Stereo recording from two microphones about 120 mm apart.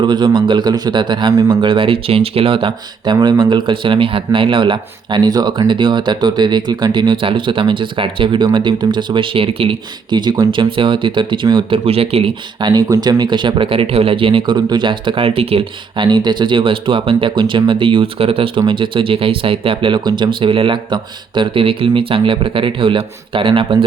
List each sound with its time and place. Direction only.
0.0 s speech: 40° right (ahead or behind)
11.9 s speech: 55° right (ahead or behind)
12.5 s speech: 35° right (ahead or behind)